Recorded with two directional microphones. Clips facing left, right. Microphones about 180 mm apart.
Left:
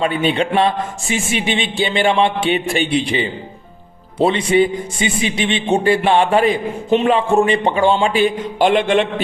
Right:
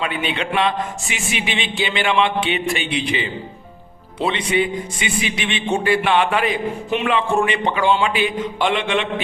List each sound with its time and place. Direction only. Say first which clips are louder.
0.0 s a man's voice: left 7 dB; 35° left (ahead or behind)
7.6 s a man's voice: left 3 dB; 40° left (ahead or behind)